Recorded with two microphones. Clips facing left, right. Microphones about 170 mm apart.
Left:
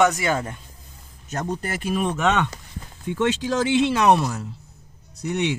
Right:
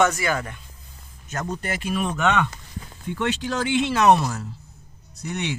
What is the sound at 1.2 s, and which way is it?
Speech, 40° left (ahead or behind).